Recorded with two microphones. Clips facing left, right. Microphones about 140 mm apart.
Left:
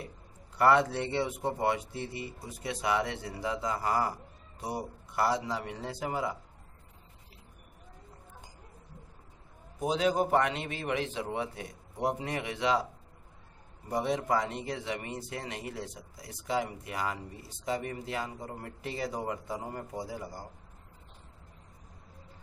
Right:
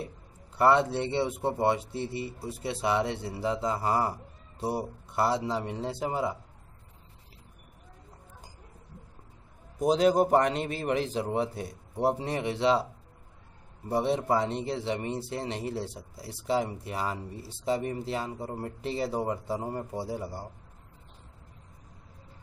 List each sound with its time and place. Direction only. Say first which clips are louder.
0.6 s speech: right 2 dB; 25° right (ahead or behind)
9.8 s a man's voice: right 5 dB; 40° right (ahead or behind)
13.8 s speech: right 3 dB; 30° right (ahead or behind)